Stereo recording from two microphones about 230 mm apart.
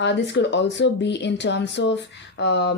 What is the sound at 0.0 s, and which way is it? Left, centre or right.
Speech, left.